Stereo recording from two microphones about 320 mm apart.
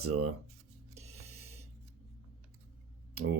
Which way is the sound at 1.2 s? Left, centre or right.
Right.